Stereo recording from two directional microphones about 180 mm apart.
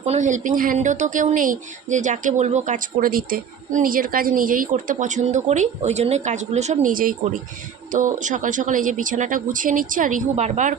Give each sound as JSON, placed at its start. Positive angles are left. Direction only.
{"t": 0.0, "sound": "speech", "side_deg": -40}